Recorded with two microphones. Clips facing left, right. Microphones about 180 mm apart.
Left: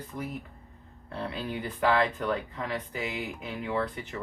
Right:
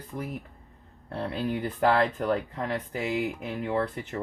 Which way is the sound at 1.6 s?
40° right (ahead or behind).